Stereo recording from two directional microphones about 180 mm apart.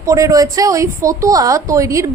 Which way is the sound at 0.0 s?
20° right (ahead or behind).